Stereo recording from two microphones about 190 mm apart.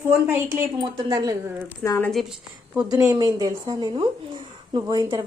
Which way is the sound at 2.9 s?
20° right (ahead or behind).